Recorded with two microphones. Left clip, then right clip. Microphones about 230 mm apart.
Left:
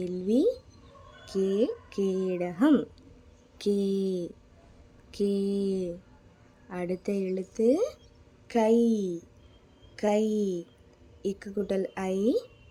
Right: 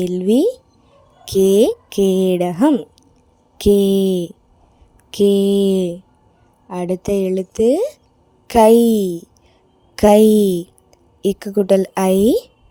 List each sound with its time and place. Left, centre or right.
0.0 s speech: right
2.6 s a woman's voice: centre
3.6 s speech: right